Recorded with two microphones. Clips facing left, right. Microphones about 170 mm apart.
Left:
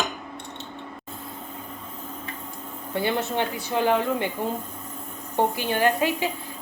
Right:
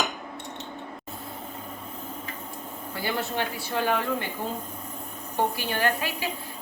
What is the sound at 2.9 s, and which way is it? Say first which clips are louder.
A woman's voice: left 5 dB; 20° left (ahead or behind).